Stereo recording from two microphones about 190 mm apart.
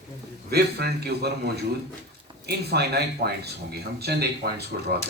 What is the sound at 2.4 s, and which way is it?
A man's voice, 60° right (ahead or behind).